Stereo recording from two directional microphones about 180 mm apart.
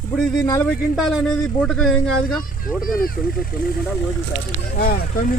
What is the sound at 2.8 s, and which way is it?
Speech, 55° left (ahead or behind).